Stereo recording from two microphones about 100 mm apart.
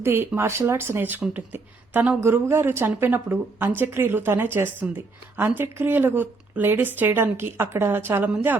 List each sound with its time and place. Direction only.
0.0 s speech: 25° right (ahead or behind)